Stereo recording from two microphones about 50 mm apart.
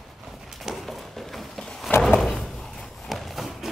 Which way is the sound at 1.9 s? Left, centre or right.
Left.